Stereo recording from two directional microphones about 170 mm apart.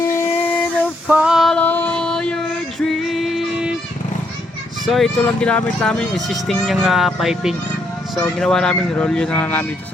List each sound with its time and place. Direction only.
0.0 s a sound: 15° left (ahead or behind)
1.0 s female singing: 5° right (ahead or behind)
4.9 s speech: centre (ahead or behind)